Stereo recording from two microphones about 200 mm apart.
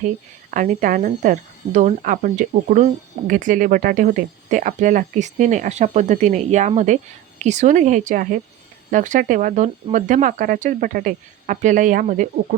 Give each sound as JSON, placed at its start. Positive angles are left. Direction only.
{"t": 0.5, "sound": "speech", "side_deg": -40}